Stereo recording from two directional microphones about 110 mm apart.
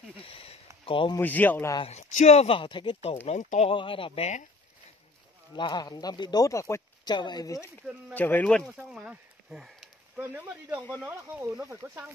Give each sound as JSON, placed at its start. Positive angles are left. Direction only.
{"t": 0.2, "sound": "a sound", "side_deg": 60}
{"t": 0.8, "sound": "speech", "side_deg": 50}
{"t": 1.2, "sound": "speech", "side_deg": 15}
{"t": 1.9, "sound": "speech", "side_deg": 85}
{"t": 2.5, "sound": "speech", "side_deg": 50}
{"t": 3.3, "sound": "speech", "side_deg": 80}
{"t": 3.7, "sound": "speech", "side_deg": 50}
{"t": 5.6, "sound": "speech", "side_deg": 40}
{"t": 7.1, "sound": "speech", "side_deg": 40}
{"t": 8.1, "sound": "speech", "side_deg": 15}
{"t": 8.9, "sound": "speech", "side_deg": -10}
{"t": 10.1, "sound": "speech", "side_deg": -15}